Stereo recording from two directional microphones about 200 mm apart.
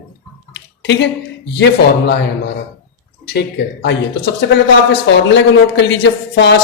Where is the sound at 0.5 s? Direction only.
60° left (ahead or behind).